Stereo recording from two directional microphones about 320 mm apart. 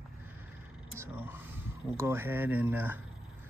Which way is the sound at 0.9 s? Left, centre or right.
Centre.